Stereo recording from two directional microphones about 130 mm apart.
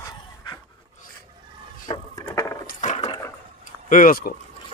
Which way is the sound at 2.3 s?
25° left (ahead or behind).